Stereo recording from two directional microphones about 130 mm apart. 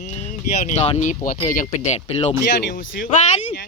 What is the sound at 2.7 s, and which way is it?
Speech, 90° left.